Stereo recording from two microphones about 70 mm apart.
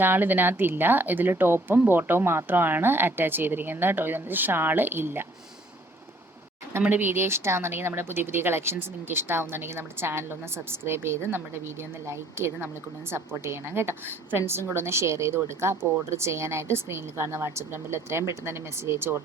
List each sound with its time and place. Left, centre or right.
0.0 s speech: right
6.8 s speech: right